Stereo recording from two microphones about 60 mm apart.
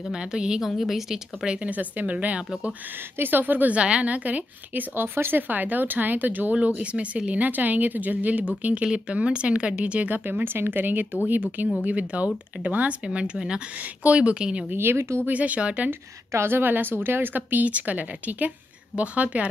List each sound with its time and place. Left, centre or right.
0.1 s a woman's voice: centre
3.2 s a woman's voice: right; by 14.7 s centre
14.7 s a woman's voice: right
15.2 s a woman's voice: right
16.3 s a woman's voice: right